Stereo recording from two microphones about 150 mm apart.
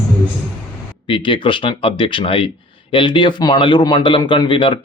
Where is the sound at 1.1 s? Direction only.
35° left (ahead or behind).